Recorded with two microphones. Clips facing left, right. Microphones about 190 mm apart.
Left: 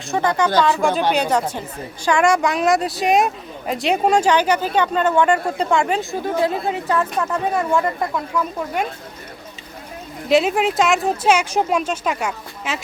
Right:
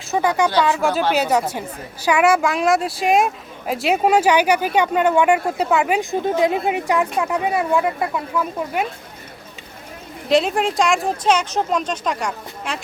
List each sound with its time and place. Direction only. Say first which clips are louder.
0.1 s a woman's voice: even; 10° right (ahead or behind)
6.0 s a woman's voice: right 2 dB; 20° right (ahead or behind)
10.2 s speech: left 1 dB; 5° left (ahead or behind)